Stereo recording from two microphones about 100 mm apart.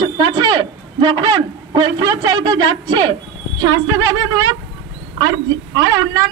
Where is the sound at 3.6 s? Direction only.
35° right (ahead or behind).